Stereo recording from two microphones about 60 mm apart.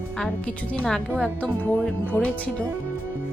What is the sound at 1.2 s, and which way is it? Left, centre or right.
Speech, left.